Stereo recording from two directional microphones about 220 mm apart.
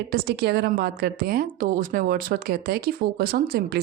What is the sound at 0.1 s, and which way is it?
A woman's voice, 45° right (ahead or behind).